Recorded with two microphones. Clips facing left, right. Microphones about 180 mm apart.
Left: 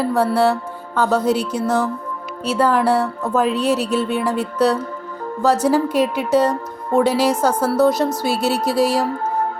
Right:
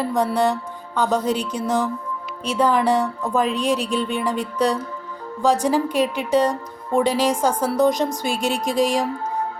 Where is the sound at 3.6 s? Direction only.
5° left (ahead or behind).